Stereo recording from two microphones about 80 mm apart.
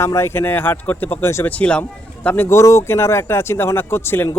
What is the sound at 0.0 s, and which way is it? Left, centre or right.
Speech, left.